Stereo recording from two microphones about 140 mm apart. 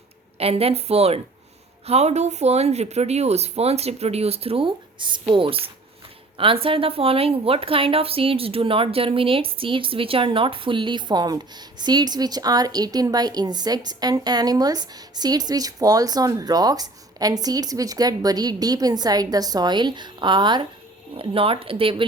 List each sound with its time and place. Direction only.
0.3 s a woman's voice: 45° right (ahead or behind)